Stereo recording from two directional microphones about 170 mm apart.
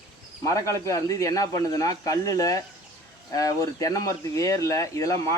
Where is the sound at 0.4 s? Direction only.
20° left (ahead or behind).